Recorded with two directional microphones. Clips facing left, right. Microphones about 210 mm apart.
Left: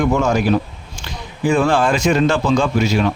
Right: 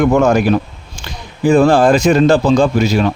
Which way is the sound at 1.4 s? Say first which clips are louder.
Right 6 dB; 35° right (ahead or behind).